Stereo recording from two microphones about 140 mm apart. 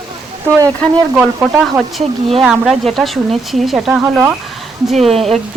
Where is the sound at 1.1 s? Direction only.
10° right (ahead or behind).